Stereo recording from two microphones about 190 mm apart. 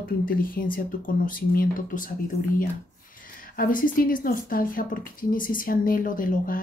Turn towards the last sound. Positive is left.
turn(degrees=45)  # may be behind; listen again after turning